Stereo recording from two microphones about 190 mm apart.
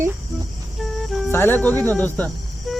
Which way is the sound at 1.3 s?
10° left (ahead or behind).